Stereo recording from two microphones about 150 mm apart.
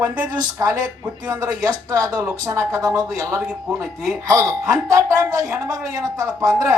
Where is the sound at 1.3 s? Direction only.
20° right (ahead or behind).